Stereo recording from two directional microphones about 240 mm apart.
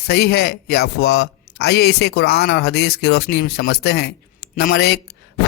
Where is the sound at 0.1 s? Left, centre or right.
Left.